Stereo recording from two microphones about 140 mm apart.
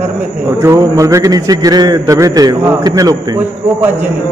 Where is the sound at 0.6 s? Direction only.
20° right (ahead or behind).